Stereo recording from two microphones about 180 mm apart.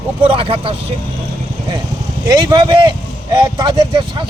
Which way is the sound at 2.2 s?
25° right (ahead or behind).